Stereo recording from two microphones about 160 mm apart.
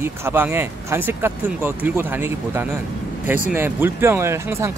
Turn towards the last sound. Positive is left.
turn(degrees=-15)  # may be behind; listen again after turning